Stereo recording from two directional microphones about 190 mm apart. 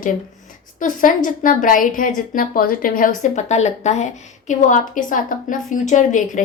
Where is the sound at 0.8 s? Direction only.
45° left (ahead or behind).